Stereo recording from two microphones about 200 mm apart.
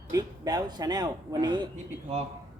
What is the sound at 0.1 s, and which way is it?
A man's voice, 20° right (ahead or behind).